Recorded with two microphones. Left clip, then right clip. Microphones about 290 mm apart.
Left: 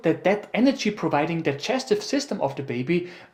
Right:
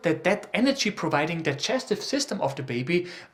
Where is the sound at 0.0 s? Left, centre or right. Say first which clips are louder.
Left 2 dB; centre.